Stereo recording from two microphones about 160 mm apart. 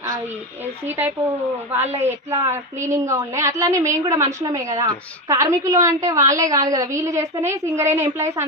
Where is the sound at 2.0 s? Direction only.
20° right (ahead or behind).